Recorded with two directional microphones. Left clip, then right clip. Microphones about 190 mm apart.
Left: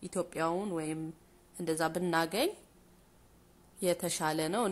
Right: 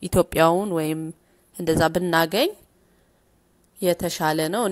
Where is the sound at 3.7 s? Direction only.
30° right (ahead or behind).